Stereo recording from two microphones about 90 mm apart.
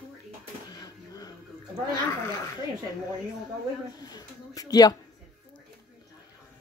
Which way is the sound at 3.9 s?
45° left (ahead or behind).